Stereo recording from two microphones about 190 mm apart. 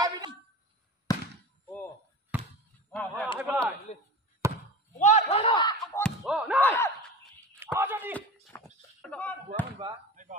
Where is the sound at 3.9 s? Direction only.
30° left (ahead or behind).